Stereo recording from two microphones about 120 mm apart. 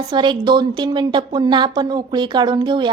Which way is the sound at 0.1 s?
40° right (ahead or behind).